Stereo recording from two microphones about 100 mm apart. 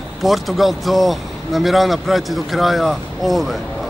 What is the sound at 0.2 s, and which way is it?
Speech, centre (ahead or behind).